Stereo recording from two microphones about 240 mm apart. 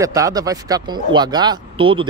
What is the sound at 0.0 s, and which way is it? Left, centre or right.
Speech, centre.